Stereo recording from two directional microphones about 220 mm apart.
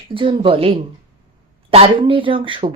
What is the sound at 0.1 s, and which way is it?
A woman's voice, 25° right (ahead or behind).